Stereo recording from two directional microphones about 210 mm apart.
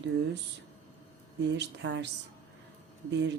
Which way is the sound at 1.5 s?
55° right (ahead or behind).